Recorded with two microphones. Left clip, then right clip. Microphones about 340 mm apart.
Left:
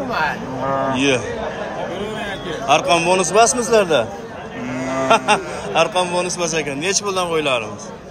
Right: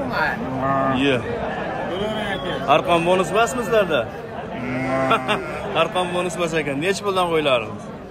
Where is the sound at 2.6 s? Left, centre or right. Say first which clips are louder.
Left 2 dB; centre.